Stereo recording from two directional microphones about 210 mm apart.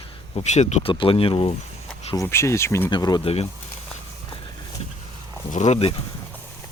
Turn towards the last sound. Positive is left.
turn(degrees=30)  # may be behind; listen again after turning